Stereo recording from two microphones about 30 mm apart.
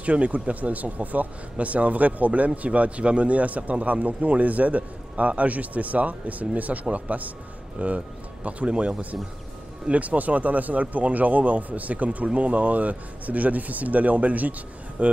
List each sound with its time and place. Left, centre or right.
0.0 s speech: right